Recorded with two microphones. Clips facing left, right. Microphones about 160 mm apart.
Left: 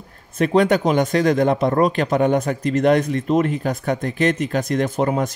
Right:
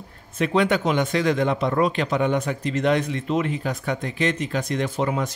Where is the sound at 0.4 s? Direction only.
40° left (ahead or behind).